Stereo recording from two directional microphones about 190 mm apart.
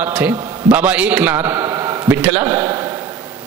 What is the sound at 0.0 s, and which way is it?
A man's voice, 10° right (ahead or behind).